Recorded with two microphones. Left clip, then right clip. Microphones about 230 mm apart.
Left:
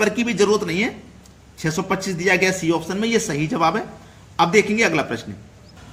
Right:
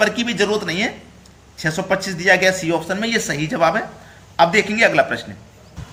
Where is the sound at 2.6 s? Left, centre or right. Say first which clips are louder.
Right 1 dB; left.